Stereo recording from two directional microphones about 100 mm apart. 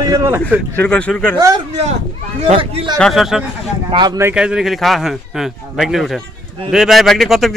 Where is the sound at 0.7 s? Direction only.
10° left (ahead or behind).